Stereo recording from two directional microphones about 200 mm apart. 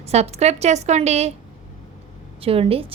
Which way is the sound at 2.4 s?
30° right (ahead or behind).